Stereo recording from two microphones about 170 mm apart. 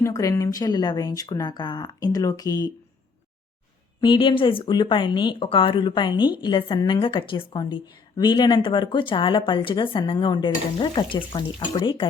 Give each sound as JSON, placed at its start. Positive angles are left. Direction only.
{"t": 0.0, "sound": "a woman's voice", "side_deg": 20}
{"t": 4.0, "sound": "a woman's voice", "side_deg": 30}